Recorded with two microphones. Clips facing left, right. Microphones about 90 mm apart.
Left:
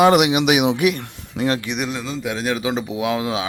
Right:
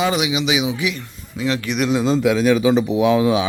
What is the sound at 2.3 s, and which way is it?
Speech, 90° right.